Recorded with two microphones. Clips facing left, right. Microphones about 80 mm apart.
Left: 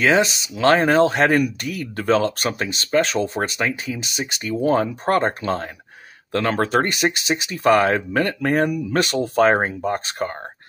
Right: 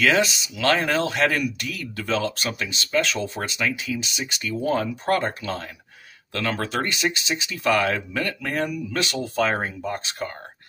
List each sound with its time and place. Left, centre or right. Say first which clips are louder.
0.0 s speech: left 3 dB; left